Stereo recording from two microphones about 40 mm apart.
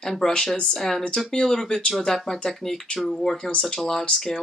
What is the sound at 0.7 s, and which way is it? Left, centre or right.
Speech, centre.